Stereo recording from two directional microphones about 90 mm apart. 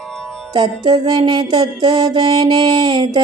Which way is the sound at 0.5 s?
50° right (ahead or behind).